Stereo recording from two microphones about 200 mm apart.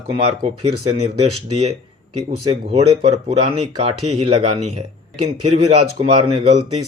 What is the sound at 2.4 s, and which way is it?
Speech, 30° right (ahead or behind).